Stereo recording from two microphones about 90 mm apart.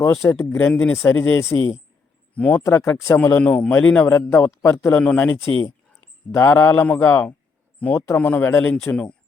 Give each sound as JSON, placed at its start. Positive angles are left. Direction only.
{"t": 0.0, "sound": "a man's voice", "side_deg": 30}
{"t": 1.1, "sound": "a man's voice", "side_deg": 30}
{"t": 2.3, "sound": "speech", "side_deg": 15}
{"t": 2.6, "sound": "a man's voice", "side_deg": 25}
{"t": 3.4, "sound": "a man's voice", "side_deg": 15}
{"t": 6.3, "sound": "a man's voice", "side_deg": 30}